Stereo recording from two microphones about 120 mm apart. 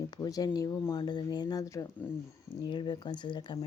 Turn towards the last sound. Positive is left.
turn(degrees=40)  # may be behind; listen again after turning